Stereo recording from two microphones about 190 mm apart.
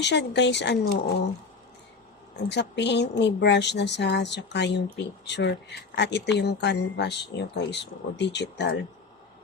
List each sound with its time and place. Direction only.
0.0 s speech: 65° left (ahead or behind)
2.5 s speech: 65° left (ahead or behind)